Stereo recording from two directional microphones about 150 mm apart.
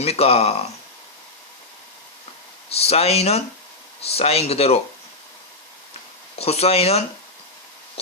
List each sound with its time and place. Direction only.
0.0 s speech: 45° left (ahead or behind)
2.6 s speech: 40° left (ahead or behind)
6.4 s speech: 45° left (ahead or behind)